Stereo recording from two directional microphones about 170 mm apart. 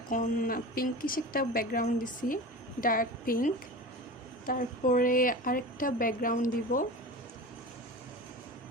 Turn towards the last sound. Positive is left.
turn(degrees=50)  # may be behind; listen again after turning